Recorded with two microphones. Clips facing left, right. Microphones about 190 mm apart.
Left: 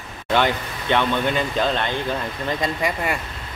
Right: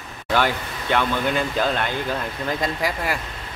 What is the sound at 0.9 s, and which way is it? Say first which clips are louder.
Speech: left 1 dB; 5° right (ahead or behind).